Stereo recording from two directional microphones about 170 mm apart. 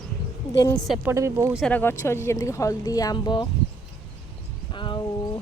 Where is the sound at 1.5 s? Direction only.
5° left (ahead or behind); by 3.4 s 25° left (ahead or behind).